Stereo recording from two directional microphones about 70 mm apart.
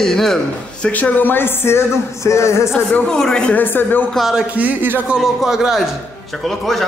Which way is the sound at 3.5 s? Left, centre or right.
Left.